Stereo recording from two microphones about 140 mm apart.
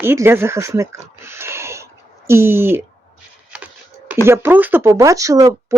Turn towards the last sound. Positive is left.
turn(degrees=-25)  # may be behind; listen again after turning